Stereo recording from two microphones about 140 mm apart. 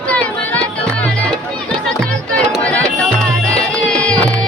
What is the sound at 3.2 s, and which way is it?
Music, 5° left (ahead or behind).